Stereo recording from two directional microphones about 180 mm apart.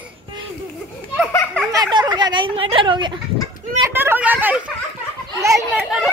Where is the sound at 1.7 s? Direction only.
20° right (ahead or behind).